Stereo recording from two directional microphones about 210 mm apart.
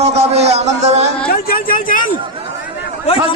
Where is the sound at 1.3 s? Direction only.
45° left (ahead or behind).